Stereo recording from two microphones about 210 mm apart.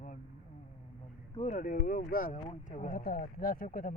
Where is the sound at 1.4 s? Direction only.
35° left (ahead or behind).